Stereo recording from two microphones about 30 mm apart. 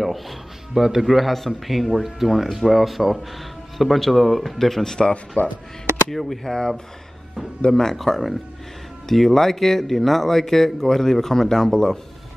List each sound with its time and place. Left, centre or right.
0.0 s music: centre
0.7 s speech: centre
1.0 s speech: centre
5.4 s speech: left
6.0 s speech: centre
7.7 s speech: centre